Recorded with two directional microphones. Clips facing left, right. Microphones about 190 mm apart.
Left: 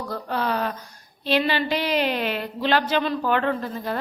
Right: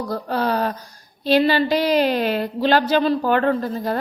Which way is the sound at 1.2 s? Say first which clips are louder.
Right 6 dB; 40° right (ahead or behind).